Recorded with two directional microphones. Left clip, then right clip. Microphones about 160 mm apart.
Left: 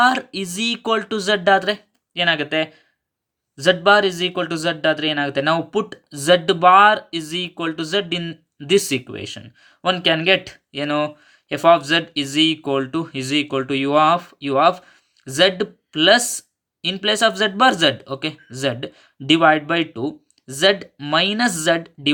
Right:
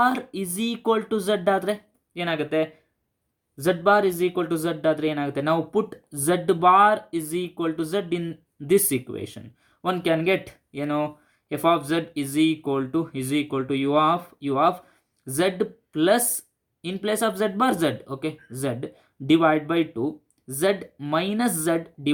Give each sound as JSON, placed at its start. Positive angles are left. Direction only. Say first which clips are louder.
{"t": 0.3, "sound": "speech", "louder": "left 6 dB", "side_deg": 20}